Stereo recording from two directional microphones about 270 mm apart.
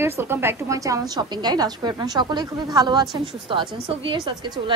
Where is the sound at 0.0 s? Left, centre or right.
Centre.